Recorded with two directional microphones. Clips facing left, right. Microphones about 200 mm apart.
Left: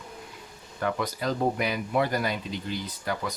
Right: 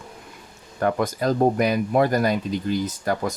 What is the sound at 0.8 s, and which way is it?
Speech, 45° right (ahead or behind).